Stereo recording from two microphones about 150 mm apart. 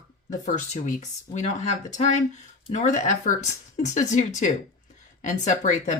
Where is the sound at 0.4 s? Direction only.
55° left (ahead or behind).